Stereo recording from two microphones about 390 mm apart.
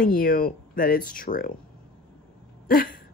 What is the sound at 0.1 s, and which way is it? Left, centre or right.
Speech, left.